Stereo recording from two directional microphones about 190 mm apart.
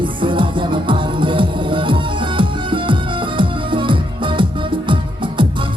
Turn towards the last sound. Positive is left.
turn(degrees=-25)  # may be behind; listen again after turning